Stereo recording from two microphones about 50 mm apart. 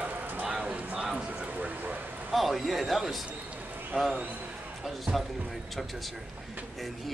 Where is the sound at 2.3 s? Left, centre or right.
Centre.